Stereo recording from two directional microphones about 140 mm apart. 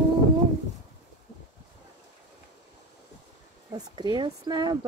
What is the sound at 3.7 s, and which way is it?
Speech, 35° right (ahead or behind).